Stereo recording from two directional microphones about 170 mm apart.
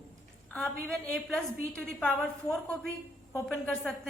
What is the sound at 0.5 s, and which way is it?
A woman's voice, 5° left (ahead or behind).